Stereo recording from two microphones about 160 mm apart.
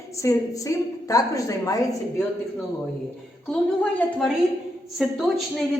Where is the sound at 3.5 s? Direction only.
5° left (ahead or behind).